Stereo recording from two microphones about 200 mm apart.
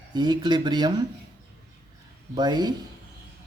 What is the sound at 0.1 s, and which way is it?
Speech, 20° right (ahead or behind).